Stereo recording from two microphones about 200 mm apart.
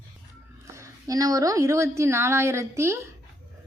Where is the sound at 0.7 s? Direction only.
15° right (ahead or behind).